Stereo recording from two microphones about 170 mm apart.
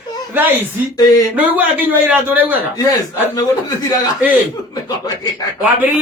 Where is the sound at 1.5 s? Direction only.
10° right (ahead or behind).